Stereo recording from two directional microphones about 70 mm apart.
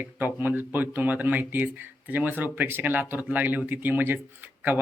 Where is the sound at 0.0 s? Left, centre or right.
Right.